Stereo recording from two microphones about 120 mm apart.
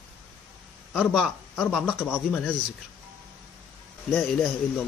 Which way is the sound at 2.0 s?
15° left (ahead or behind).